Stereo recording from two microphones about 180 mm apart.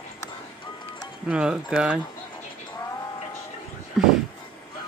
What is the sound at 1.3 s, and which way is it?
Speech, 5° right (ahead or behind).